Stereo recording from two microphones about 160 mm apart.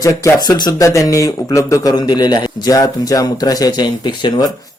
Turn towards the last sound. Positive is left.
turn(degrees=30)  # may be behind; listen again after turning